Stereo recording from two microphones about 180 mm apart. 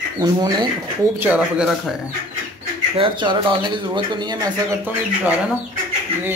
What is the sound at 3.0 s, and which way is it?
Speech, 25° right (ahead or behind).